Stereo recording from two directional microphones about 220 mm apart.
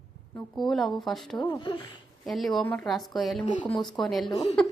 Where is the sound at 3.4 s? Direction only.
25° left (ahead or behind).